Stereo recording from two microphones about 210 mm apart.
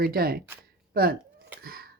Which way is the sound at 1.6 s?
45° right (ahead or behind).